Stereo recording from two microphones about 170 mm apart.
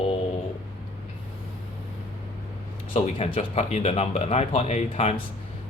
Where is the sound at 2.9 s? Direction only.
35° left (ahead or behind).